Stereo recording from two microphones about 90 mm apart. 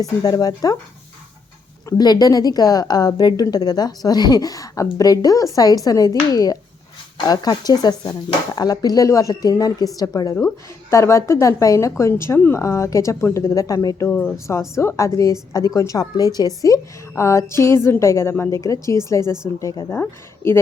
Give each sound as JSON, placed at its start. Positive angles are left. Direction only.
{"t": 0.0, "sound": "a woman's voice", "side_deg": 45}
{"t": 1.9, "sound": "a woman's voice", "side_deg": 45}
{"t": 10.9, "sound": "a woman's voice", "side_deg": 30}
{"t": 14.1, "sound": "speech", "side_deg": 15}
{"t": 14.3, "sound": "a woman's voice", "side_deg": 35}
{"t": 19.9, "sound": "speech", "side_deg": 25}